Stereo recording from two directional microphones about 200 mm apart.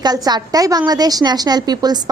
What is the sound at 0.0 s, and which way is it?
A woman's voice, 20° right (ahead or behind).